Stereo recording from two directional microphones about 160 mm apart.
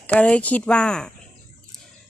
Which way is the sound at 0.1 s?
10° left (ahead or behind).